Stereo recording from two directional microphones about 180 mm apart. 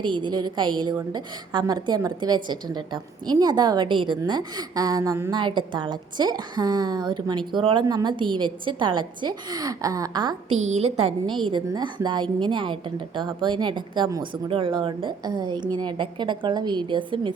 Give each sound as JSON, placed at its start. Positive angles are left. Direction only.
{"t": 0.0, "sound": "a woman's voice", "side_deg": -25}
{"t": 10.5, "sound": "a woman's voice", "side_deg": -35}